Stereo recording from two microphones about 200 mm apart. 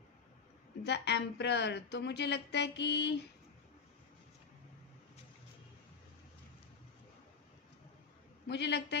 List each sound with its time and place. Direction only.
0.9 s speech: 55° left (ahead or behind)
8.4 s speech: 60° left (ahead or behind)